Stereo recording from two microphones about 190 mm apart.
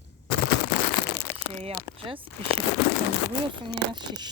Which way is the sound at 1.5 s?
30° right (ahead or behind).